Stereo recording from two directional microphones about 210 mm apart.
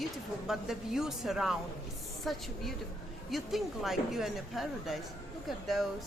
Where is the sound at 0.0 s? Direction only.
Centre (ahead or behind).